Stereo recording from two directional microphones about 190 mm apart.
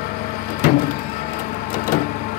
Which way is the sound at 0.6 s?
50° left (ahead or behind).